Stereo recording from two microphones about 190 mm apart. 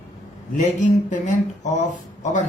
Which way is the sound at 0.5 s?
40° left (ahead or behind).